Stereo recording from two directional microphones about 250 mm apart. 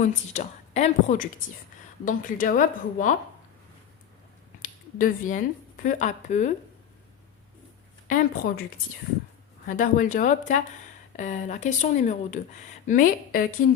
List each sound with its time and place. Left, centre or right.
0.0 s a woman's voice: left
4.6 s speech: left
8.0 s a woman's voice: left
9.6 s a woman's voice: left